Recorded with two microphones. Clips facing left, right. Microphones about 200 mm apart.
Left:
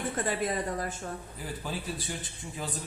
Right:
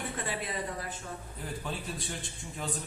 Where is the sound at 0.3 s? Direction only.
45° left (ahead or behind).